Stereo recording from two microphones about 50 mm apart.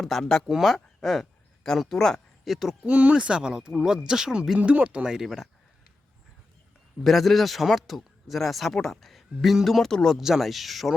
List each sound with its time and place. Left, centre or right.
0.0 s speech: centre
2.5 s speech: centre
2.8 s speech: right; by 5.5 s centre
7.0 s speech: centre
10.2 s speech: centre